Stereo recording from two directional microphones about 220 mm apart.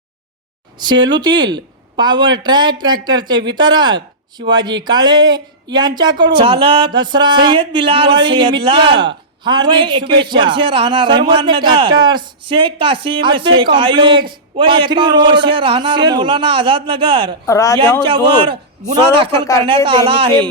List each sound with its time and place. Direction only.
0.8 s speech: 20° right (ahead or behind)
17.4 s speech: 15° left (ahead or behind)
18.0 s speech: 25° right (ahead or behind)